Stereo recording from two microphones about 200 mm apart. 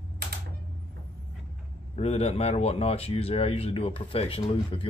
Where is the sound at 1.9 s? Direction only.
30° left (ahead or behind).